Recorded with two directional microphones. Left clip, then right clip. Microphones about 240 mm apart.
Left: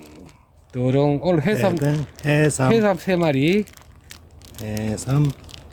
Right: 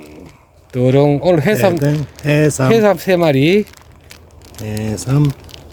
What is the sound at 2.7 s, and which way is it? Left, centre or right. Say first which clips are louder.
Speech: right 10 dB; right.